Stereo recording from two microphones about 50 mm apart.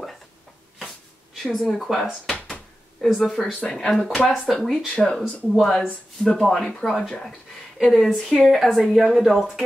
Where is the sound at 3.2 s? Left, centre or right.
Centre.